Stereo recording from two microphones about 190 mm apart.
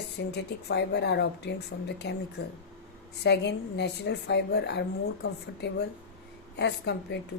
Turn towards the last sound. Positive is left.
turn(degrees=65)  # may be behind; listen again after turning